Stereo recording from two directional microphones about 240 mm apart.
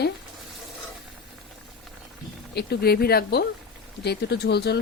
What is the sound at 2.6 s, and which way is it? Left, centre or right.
Speech, left.